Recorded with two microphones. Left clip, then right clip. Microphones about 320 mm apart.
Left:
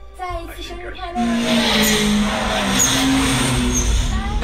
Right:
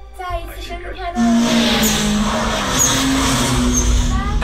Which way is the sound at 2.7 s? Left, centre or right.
Centre.